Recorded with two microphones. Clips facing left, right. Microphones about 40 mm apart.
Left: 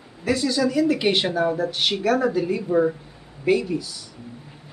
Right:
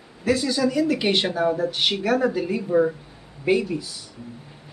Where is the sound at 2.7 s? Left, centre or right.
Centre.